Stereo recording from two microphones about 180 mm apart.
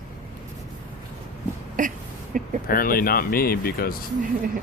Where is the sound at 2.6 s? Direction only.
55° left (ahead or behind).